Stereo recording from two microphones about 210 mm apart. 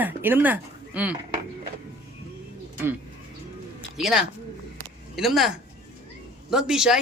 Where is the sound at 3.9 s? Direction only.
Centre (ahead or behind).